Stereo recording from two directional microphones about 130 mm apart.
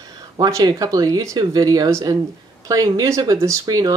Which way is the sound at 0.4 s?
30° right (ahead or behind).